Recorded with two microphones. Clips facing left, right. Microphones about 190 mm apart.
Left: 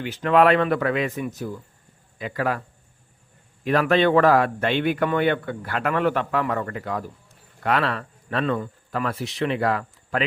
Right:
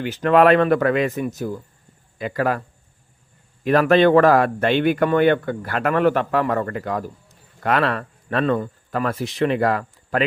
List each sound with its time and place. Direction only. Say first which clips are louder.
0.0 s a man's voice: right 3 dB; 45° right (ahead or behind)
3.7 s speech: right 4 dB; 45° right (ahead or behind)